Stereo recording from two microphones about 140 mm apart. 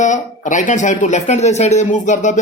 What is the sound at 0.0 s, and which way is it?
Speech, 60° left (ahead or behind).